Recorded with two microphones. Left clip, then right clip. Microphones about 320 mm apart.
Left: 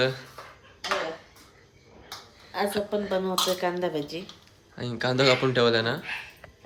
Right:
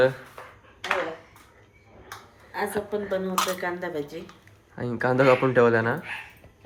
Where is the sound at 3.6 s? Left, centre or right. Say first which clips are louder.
Left 2 dB; centre.